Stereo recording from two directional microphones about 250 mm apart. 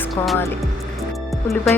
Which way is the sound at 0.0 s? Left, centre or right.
Centre.